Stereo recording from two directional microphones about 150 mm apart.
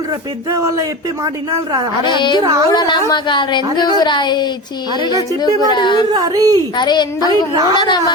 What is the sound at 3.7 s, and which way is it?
Child singing, 30° left (ahead or behind).